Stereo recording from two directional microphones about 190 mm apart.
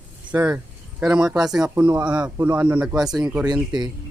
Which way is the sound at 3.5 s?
20° right (ahead or behind).